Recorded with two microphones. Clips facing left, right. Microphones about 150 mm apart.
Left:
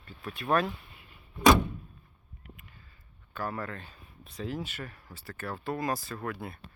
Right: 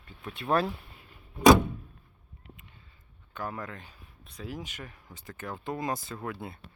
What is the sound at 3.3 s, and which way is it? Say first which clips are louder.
Speech: left 2 dB; 15° right (ahead or behind).